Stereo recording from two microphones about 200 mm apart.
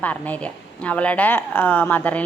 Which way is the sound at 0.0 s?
10° left (ahead or behind).